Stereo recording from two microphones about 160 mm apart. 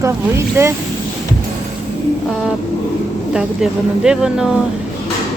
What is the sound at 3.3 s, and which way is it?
Speech, 5° right (ahead or behind).